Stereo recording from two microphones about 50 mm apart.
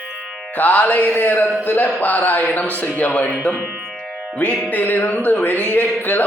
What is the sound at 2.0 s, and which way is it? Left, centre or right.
Music, left.